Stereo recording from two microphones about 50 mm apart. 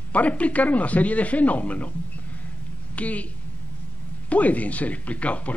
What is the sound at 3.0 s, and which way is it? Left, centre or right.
Speech, left.